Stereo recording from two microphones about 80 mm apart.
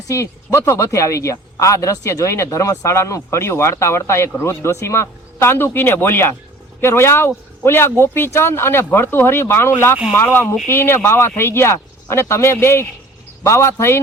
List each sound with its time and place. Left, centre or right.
0.1 s speech: left